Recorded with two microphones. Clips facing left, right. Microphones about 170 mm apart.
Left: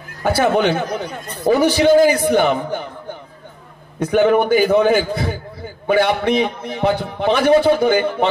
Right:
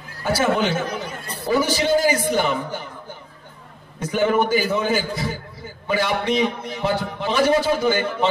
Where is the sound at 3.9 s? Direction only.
60° left (ahead or behind).